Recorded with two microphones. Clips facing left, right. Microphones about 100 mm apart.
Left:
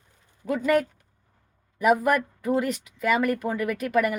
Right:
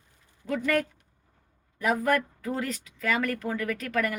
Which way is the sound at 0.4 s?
15° left (ahead or behind).